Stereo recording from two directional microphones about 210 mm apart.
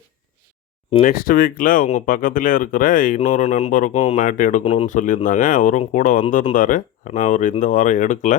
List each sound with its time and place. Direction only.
1.0 s speech: 40° left (ahead or behind)